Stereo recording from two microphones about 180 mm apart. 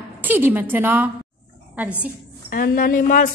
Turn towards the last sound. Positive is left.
turn(degrees=50)  # may be behind; listen again after turning